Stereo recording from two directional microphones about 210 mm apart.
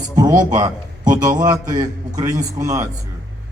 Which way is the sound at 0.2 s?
20° right (ahead or behind).